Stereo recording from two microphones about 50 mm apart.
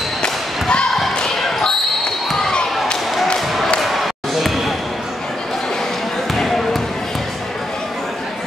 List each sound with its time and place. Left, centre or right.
0.2 s basketball bounce: centre
3.3 s a sound: centre
3.8 s basketball bounce: centre
6.3 s basketball bounce: centre